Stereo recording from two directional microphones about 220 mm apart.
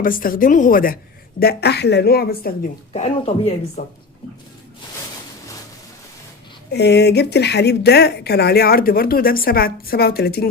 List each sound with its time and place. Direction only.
0.0 s speech: 40° left (ahead or behind)
2.9 s speech: 25° left (ahead or behind)
6.7 s speech: 50° left (ahead or behind)